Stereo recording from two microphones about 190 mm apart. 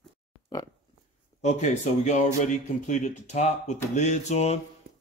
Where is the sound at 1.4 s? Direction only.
40° left (ahead or behind).